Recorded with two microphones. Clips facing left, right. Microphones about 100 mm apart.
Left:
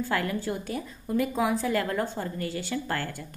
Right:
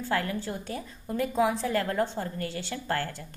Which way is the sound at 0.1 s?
35° right (ahead or behind).